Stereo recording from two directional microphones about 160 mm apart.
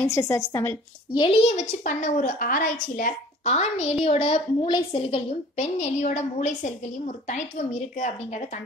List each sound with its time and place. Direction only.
0.1 s a woman's voice: 20° left (ahead or behind)
1.2 s a woman's voice: 40° left (ahead or behind)